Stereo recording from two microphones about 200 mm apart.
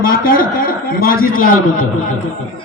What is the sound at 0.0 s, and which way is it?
A man's voice, 45° left (ahead or behind).